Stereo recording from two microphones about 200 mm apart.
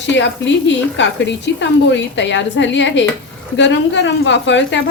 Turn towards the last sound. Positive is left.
turn(degrees=65)  # may be behind; listen again after turning